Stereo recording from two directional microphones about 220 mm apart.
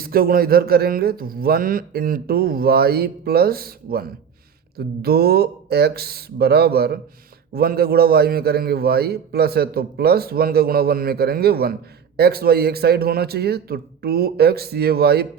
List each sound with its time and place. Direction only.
0.0 s a man's voice: 40° right (ahead or behind)